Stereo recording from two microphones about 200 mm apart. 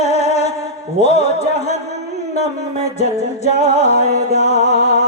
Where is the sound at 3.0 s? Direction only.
35° left (ahead or behind).